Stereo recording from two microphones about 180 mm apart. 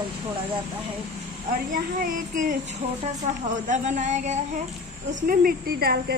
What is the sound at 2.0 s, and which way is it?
Child singing, 50° right (ahead or behind).